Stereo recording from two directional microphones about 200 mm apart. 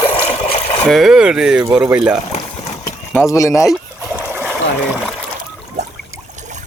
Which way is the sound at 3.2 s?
15° left (ahead or behind).